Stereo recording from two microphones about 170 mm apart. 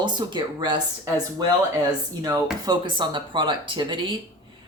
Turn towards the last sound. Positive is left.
turn(degrees=-30)  # may be behind; listen again after turning